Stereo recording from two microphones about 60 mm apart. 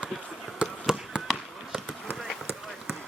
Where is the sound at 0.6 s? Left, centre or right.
Centre.